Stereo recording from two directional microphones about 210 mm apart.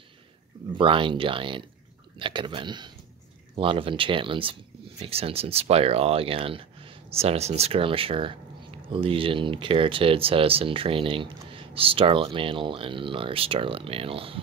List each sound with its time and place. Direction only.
0.7 s speech: 25° right (ahead or behind)